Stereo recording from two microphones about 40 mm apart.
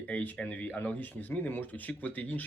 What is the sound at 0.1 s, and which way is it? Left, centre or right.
Speech, left.